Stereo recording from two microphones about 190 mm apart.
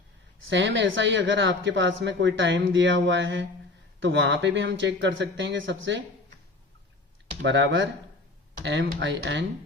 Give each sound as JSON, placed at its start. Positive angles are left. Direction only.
{"t": 0.4, "sound": "speech", "side_deg": -75}
{"t": 7.4, "sound": "speech", "side_deg": -70}